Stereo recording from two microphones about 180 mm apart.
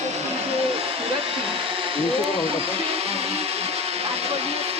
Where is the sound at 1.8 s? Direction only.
30° right (ahead or behind).